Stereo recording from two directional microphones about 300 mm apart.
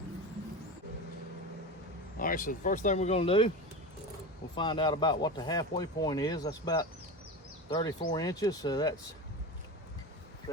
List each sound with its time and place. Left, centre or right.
2.1 s speech: left
4.5 s speech: centre